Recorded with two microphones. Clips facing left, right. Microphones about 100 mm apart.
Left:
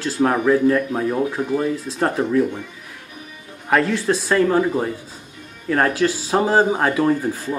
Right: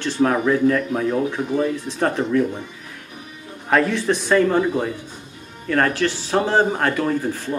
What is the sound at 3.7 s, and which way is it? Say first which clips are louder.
Speech: even; centre (ahead or behind).